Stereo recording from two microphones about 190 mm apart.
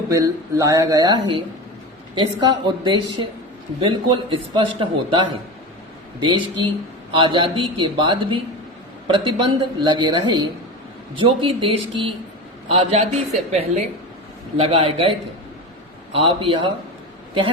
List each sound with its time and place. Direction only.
0.1 s a man's voice: 15° right (ahead or behind)
16.1 s a man's voice: 30° right (ahead or behind)